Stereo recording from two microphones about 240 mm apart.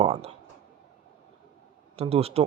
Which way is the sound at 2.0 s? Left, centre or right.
Right.